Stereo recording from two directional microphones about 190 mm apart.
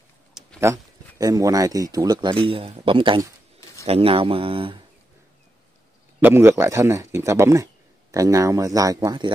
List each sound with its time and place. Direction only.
0.3 s a sound: centre (ahead or behind)
0.6 s speech: 15° right (ahead or behind)
6.2 s a man's voice: 15° right (ahead or behind)